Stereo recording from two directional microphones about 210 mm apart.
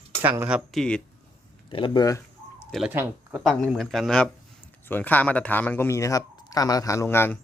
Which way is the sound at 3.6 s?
Centre (ahead or behind).